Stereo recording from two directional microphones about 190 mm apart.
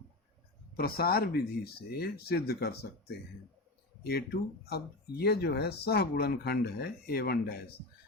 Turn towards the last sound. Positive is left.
turn(degrees=55)  # may be behind; listen again after turning